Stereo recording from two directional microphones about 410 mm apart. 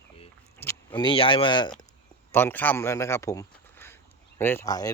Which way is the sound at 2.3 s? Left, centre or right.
Centre.